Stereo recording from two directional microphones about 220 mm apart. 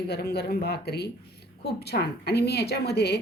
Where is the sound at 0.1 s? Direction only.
45° left (ahead or behind).